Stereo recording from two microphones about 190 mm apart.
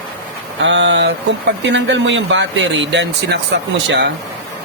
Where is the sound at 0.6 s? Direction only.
75° right (ahead or behind).